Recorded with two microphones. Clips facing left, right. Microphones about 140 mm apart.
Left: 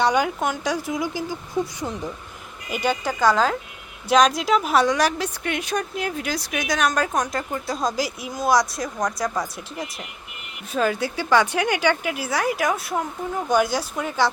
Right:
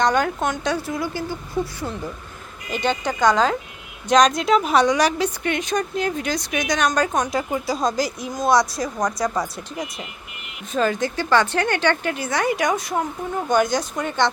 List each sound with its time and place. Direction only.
0.0 s a woman's voice: 10° left (ahead or behind)